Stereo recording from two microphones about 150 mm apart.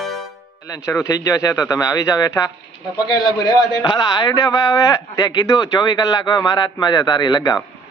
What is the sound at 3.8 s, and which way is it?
Speech, 25° left (ahead or behind).